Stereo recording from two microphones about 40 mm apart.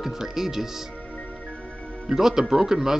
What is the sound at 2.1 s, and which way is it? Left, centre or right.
Speech, centre.